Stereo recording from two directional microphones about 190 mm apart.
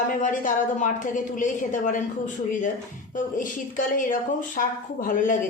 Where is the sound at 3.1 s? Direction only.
45° left (ahead or behind).